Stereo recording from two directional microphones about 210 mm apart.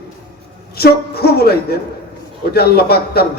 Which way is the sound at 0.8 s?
50° left (ahead or behind).